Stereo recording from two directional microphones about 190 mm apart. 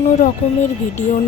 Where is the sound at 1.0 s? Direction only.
40° left (ahead or behind).